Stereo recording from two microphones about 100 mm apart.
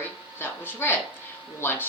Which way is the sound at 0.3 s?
20° left (ahead or behind).